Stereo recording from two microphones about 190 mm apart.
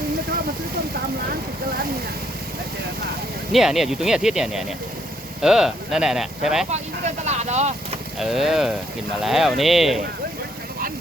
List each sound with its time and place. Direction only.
3.5 s speech: centre (ahead or behind)
6.7 s speech: 35° right (ahead or behind)
8.2 s speech: centre (ahead or behind)